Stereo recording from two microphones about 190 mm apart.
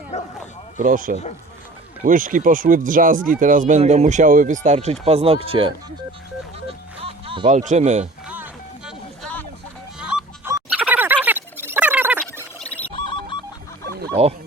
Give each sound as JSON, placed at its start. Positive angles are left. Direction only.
{"t": 0.1, "sound": "speech", "side_deg": 35}
{"t": 0.8, "sound": "speech", "side_deg": -45}
{"t": 6.7, "sound": "music", "side_deg": -30}
{"t": 7.5, "sound": "speech", "side_deg": -40}
{"t": 8.3, "sound": "music", "side_deg": -5}
{"t": 10.7, "sound": "a sound", "side_deg": -10}
{"t": 12.5, "sound": "music", "side_deg": 10}
{"t": 12.9, "sound": "music", "side_deg": 25}
{"t": 14.2, "sound": "speech", "side_deg": -30}